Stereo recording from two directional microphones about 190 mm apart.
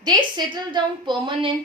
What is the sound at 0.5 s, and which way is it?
Speech, 25° right (ahead or behind).